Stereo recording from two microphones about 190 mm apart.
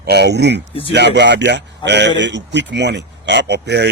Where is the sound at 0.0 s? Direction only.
60° right (ahead or behind).